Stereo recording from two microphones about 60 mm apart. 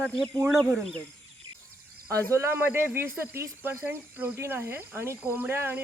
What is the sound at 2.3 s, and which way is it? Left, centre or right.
Speech, right.